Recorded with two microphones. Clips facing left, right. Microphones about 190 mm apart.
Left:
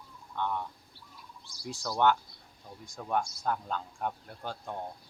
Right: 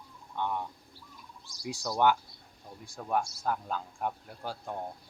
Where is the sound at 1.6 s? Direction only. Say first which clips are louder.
Even; 15° right (ahead or behind).